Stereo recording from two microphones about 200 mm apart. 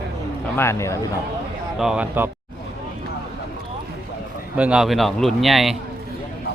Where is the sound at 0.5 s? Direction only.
15° left (ahead or behind).